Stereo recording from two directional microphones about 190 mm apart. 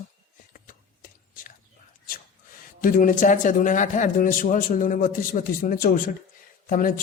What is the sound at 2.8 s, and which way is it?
A man's voice, 45° left (ahead or behind).